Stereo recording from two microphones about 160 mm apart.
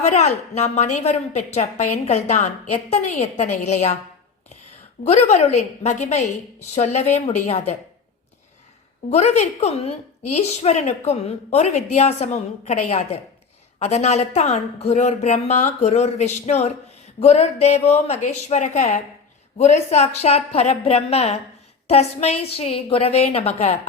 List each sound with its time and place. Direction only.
0.0 s a woman's voice: 45° left (ahead or behind)
5.0 s a woman's voice: 45° left (ahead or behind)
9.0 s a woman's voice: 45° left (ahead or behind)